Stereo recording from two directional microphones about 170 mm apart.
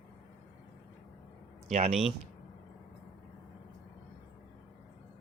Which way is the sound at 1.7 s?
40° right (ahead or behind).